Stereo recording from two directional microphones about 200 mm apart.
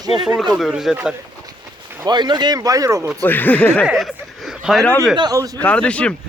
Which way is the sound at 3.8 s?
Centre (ahead or behind).